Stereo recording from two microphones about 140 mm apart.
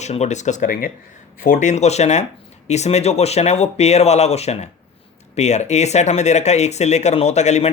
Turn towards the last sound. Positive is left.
turn(degrees=55)  # may be behind; listen again after turning